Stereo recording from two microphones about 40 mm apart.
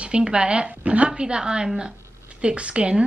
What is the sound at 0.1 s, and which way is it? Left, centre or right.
A woman's voice, right.